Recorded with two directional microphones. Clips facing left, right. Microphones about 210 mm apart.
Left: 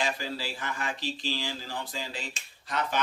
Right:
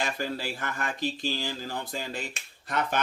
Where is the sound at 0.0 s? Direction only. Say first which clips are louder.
Right 1 dB; 50° right (ahead or behind).